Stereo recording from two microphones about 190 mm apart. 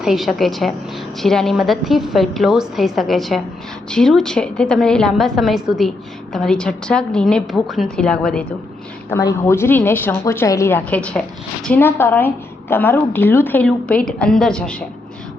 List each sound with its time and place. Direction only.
0.0 s a woman's voice: centre (ahead or behind)
9.0 s a woman's voice: 15° left (ahead or behind)